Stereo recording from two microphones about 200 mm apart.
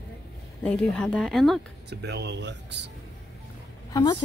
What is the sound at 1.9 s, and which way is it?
Speech, 60° right (ahead or behind).